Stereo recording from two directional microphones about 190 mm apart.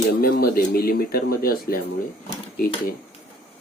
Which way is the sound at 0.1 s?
50° left (ahead or behind).